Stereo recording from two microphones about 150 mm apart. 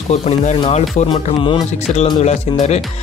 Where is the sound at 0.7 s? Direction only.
45° left (ahead or behind).